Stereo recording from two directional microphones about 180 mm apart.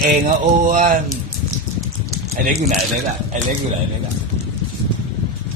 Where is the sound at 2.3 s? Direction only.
50° right (ahead or behind).